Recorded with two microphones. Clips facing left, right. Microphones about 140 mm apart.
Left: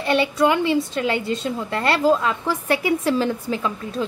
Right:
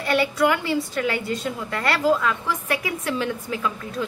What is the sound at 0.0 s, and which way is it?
A woman's voice, 25° left (ahead or behind).